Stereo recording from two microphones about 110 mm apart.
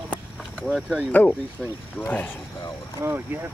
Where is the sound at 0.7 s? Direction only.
5° right (ahead or behind).